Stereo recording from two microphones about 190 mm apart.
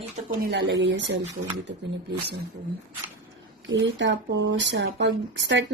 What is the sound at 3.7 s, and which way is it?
Speech, 80° right.